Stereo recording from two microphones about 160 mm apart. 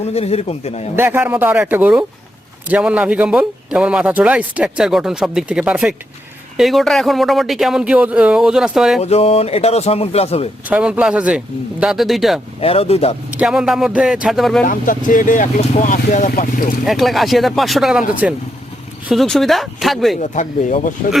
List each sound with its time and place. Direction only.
0.0 s speech: 40° left (ahead or behind)
0.9 s a man's voice: 15° right (ahead or behind)
9.0 s speech: 40° left (ahead or behind)
10.7 s a man's voice: 10° right (ahead or behind)
12.5 s speech: 40° left (ahead or behind)
13.3 s a man's voice: 5° right (ahead or behind)
14.7 s speech: 55° left (ahead or behind)
16.8 s a man's voice: centre (ahead or behind)
20.2 s speech: 50° left (ahead or behind)